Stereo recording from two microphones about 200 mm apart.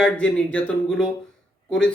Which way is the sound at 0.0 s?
5° left (ahead or behind).